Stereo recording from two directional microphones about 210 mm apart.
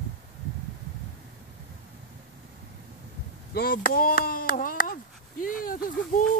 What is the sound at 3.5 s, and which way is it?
Speech, 45° left (ahead or behind).